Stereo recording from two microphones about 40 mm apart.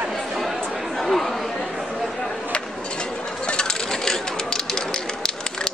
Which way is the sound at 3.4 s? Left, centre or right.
Left.